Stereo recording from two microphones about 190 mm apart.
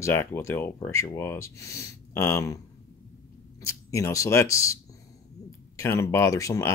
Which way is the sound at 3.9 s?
15° left (ahead or behind).